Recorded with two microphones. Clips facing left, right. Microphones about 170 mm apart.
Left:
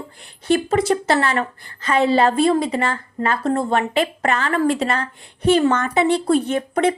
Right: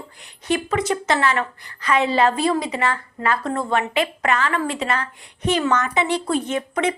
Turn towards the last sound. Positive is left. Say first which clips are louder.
# left 4 dB
turn(degrees=35)  # may be behind; listen again after turning